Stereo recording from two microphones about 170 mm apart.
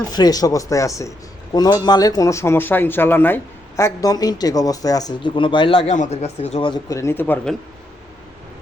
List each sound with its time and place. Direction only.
0.1 s speech: 25° left (ahead or behind)
5.9 s speech: 40° left (ahead or behind)
6.9 s speech: 15° left (ahead or behind)